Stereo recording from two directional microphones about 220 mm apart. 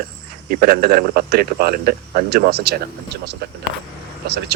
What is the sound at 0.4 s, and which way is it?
Speech, 40° right (ahead or behind).